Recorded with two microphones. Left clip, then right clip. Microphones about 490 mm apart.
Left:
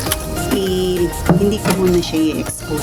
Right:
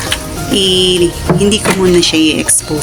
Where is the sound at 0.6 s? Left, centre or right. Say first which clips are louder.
Right 10 dB; left.